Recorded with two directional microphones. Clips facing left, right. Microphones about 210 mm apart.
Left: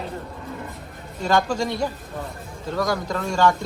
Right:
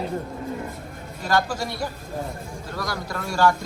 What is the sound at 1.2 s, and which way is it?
Speech, 5° right (ahead or behind).